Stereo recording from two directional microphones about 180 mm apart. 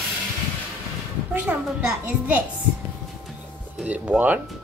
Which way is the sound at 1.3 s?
10° right (ahead or behind).